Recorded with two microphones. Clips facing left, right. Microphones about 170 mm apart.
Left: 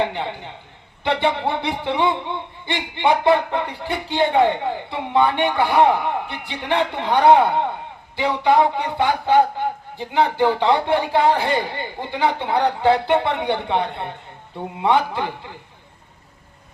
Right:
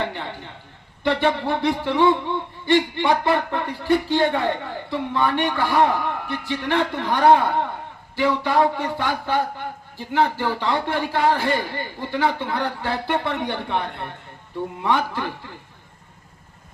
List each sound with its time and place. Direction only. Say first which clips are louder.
0.0 s a man's voice: left 5 dB; 15° left (ahead or behind)